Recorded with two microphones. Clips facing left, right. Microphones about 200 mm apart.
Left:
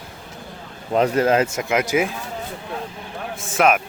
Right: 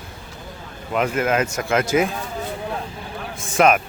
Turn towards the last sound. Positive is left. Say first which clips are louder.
# right 1 dB
turn(degrees=5)  # may be behind; listen again after turning